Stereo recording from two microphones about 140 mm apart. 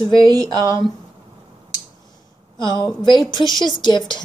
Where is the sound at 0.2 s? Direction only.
25° right (ahead or behind).